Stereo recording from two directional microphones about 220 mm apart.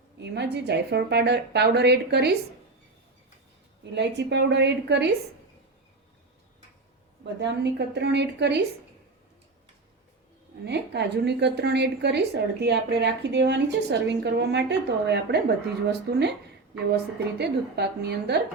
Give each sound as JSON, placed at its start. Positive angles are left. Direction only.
{"t": 0.2, "sound": "a woman's voice", "side_deg": -50}
{"t": 3.9, "sound": "a woman's voice", "side_deg": -50}
{"t": 7.3, "sound": "a woman's voice", "side_deg": -50}
{"t": 10.7, "sound": "a woman's voice", "side_deg": -50}